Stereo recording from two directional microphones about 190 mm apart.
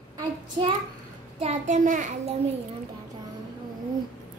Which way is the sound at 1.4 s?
40° right (ahead or behind).